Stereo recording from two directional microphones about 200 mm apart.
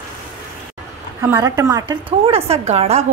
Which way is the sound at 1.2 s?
15° right (ahead or behind).